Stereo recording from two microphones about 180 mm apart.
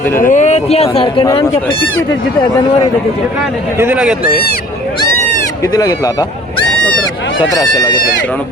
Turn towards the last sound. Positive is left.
turn(degrees=20)  # may be behind; listen again after turning